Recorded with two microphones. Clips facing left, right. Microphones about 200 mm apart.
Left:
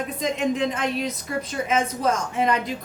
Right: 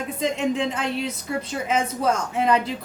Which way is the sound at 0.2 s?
30° right (ahead or behind).